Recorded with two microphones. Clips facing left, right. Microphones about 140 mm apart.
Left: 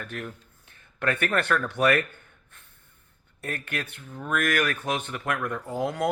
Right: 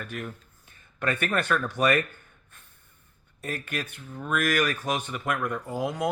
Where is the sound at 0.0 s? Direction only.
60° left (ahead or behind).